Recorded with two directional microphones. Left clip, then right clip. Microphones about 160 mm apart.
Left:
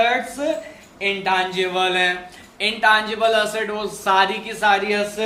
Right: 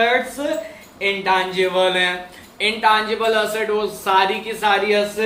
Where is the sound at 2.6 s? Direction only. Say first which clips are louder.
Even; 55° left (ahead or behind).